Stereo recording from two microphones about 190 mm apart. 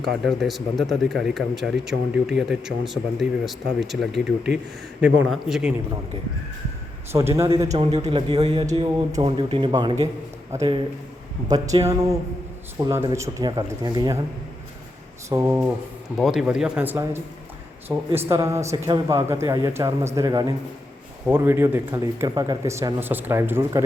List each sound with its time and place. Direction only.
0.0 s speech: centre (ahead or behind)
7.1 s a man's voice: 15° right (ahead or behind)
7.8 s speech: 35° right (ahead or behind)
8.7 s a man's voice: 20° right (ahead or behind)
15.3 s a man's voice: 15° right (ahead or behind)
16.1 s a man's voice: centre (ahead or behind)